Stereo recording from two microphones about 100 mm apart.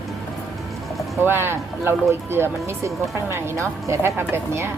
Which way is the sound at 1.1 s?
25° right (ahead or behind).